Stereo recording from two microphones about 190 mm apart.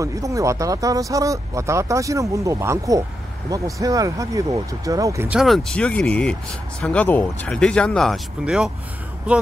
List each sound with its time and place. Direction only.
0.0 s speech: 15° right (ahead or behind)
5.4 s speech: centre (ahead or behind)